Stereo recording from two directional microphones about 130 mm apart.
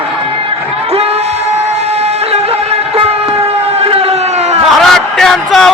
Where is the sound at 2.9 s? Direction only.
50° right (ahead or behind).